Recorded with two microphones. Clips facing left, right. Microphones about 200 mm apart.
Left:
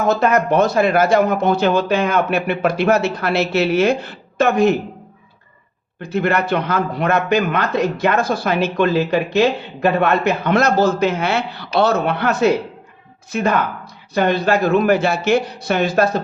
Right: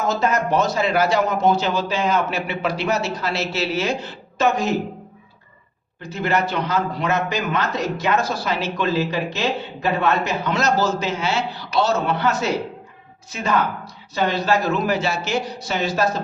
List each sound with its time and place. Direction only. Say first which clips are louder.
0.0 s speech: left 5 dB; 60° left (ahead or behind)
6.0 s speech: left 3 dB; 55° left (ahead or behind)